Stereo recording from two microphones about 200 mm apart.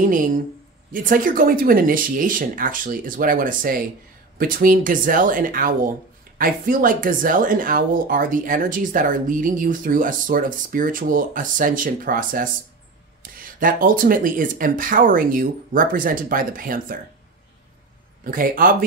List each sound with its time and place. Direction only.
0.0 s speech: 40° right (ahead or behind)
18.2 s speech: 45° right (ahead or behind)